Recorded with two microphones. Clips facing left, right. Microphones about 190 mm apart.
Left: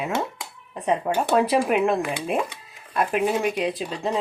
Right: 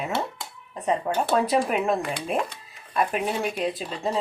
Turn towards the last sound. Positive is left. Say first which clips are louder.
# left 2 dB
turn(degrees=0)  # may be behind; listen again after turning